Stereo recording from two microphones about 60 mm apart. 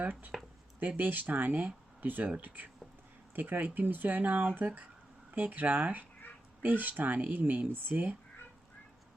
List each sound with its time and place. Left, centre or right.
0.0 s speech: right